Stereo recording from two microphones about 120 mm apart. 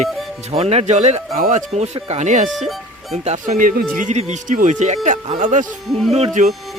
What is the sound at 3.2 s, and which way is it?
Speech, 80° right.